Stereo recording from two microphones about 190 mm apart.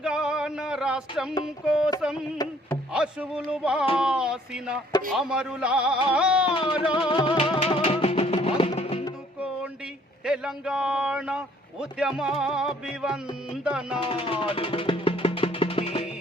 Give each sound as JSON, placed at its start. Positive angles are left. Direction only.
{"t": 0.0, "sound": "a sound", "side_deg": -5}
{"t": 1.5, "sound": "a man's voice", "side_deg": -5}
{"t": 2.4, "sound": "music", "side_deg": 20}
{"t": 2.9, "sound": "a man's voice", "side_deg": -5}
{"t": 6.5, "sound": "music", "side_deg": 25}
{"t": 10.2, "sound": "a man's voice", "side_deg": -5}
{"t": 14.0, "sound": "music", "side_deg": 30}